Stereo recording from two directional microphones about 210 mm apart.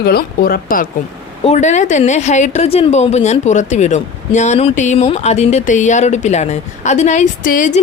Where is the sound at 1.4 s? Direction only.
30° left (ahead or behind).